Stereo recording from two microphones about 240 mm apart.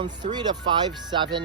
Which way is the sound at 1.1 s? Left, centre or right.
Centre.